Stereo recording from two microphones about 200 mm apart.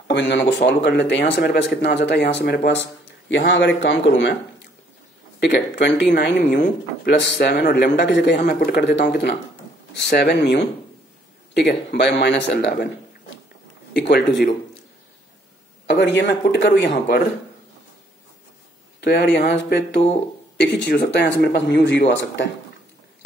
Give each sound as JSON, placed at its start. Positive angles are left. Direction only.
{"t": 0.1, "sound": "speech", "side_deg": 65}
{"t": 5.4, "sound": "speech", "side_deg": 60}
{"t": 13.9, "sound": "speech", "side_deg": 55}
{"t": 15.9, "sound": "speech", "side_deg": 60}
{"t": 18.9, "sound": "speech", "side_deg": 55}